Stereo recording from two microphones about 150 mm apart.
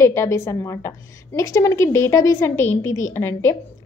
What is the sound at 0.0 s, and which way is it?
A woman's voice, 20° left (ahead or behind).